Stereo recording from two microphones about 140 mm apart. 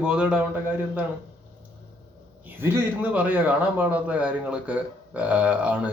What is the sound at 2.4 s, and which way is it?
A man's voice, 15° right (ahead or behind).